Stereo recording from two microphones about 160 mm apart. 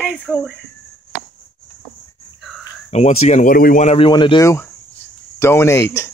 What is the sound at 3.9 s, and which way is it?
Speech, 35° left (ahead or behind).